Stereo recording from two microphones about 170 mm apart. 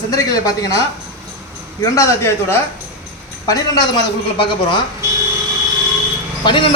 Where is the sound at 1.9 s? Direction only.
15° left (ahead or behind).